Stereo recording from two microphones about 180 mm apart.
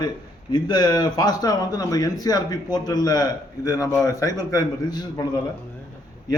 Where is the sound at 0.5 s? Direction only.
25° left (ahead or behind).